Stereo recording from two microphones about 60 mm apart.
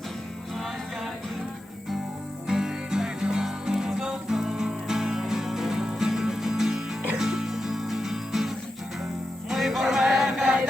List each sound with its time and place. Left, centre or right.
2.5 s music: centre